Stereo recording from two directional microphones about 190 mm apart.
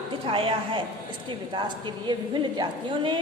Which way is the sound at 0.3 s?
30° right (ahead or behind).